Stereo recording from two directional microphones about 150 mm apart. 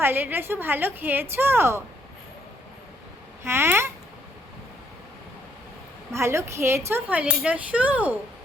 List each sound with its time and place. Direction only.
0.0 s speech: 15° right (ahead or behind)
3.4 s speech: 15° right (ahead or behind)
6.1 s speech: 20° right (ahead or behind)